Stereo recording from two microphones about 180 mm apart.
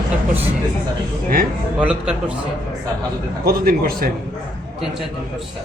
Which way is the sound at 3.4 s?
55° right (ahead or behind).